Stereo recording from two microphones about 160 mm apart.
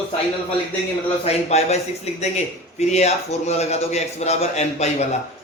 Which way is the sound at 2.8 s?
45° left (ahead or behind).